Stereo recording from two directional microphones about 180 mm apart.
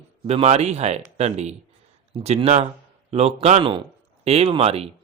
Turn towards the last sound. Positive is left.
turn(degrees=-35)  # may be behind; listen again after turning